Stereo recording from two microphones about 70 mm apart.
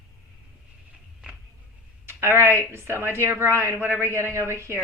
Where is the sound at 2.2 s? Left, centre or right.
Right.